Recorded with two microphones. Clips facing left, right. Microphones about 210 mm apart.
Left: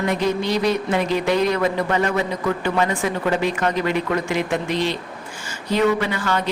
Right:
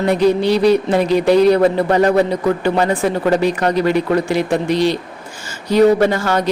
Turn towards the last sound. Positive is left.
turn(degrees=-40)  # may be behind; listen again after turning